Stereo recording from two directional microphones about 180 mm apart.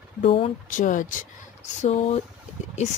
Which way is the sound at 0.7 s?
45° left (ahead or behind).